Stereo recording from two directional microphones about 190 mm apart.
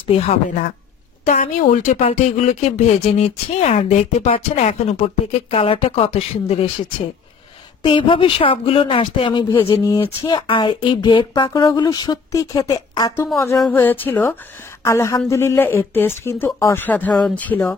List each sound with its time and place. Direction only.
0.0 s speech: 30° left (ahead or behind)
7.8 s speech: 25° left (ahead or behind); by 17.7 s 10° left (ahead or behind)